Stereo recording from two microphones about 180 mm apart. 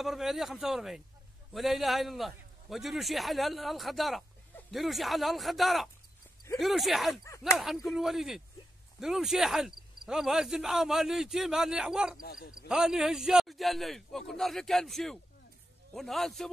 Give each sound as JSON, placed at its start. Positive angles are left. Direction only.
{"t": 0.0, "sound": "speech", "side_deg": 0}
{"t": 7.2, "sound": "speech", "side_deg": 15}
{"t": 7.5, "sound": "speech", "side_deg": 0}